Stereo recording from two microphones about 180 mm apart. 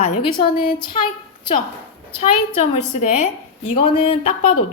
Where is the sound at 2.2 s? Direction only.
40° left (ahead or behind).